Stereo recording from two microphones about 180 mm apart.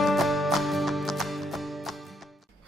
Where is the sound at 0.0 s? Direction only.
Centre (ahead or behind).